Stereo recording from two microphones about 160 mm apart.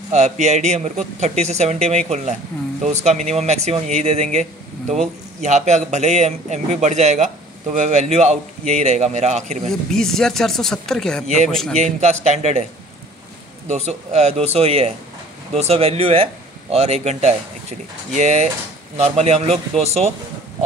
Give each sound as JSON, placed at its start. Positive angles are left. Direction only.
{"t": 0.1, "sound": "speech", "side_deg": -45}
{"t": 9.7, "sound": "speech", "side_deg": 5}
{"t": 11.8, "sound": "speech", "side_deg": -45}
{"t": 13.7, "sound": "speech", "side_deg": -40}